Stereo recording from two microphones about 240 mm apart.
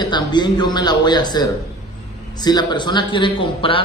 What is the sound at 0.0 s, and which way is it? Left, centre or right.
Speech, centre.